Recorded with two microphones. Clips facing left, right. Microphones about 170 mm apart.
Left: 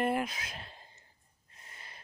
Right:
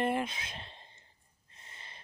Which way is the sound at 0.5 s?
25° right (ahead or behind).